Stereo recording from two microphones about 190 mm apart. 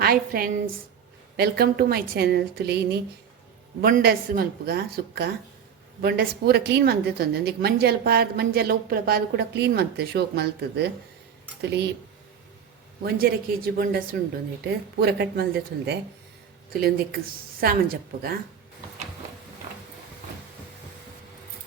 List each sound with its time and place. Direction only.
0.0 s a woman's voice: 50° right (ahead or behind)
13.0 s a woman's voice: 50° right (ahead or behind)